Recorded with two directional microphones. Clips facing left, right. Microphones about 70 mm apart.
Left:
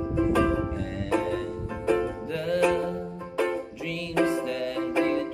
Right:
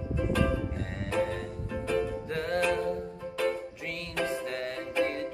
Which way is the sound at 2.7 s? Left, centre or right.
Left.